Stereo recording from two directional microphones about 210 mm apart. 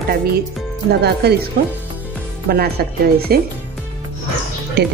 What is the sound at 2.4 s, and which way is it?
Speech, 45° right (ahead or behind).